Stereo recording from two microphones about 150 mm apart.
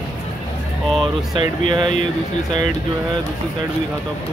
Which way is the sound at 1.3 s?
30° right (ahead or behind).